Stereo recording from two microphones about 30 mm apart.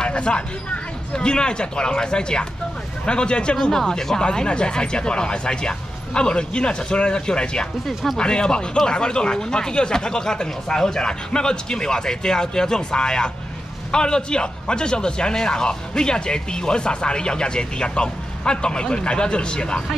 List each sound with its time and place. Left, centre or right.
0.0 s a sound: left
1.1 s a man's voice: left
3.7 s speech: centre
4.2 s a man's voice: left